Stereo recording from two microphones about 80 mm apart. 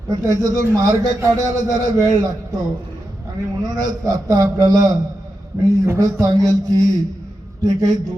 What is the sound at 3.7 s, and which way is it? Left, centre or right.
A man's voice, right.